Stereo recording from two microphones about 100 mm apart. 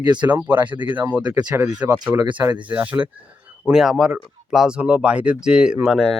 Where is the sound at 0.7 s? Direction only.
50° right (ahead or behind).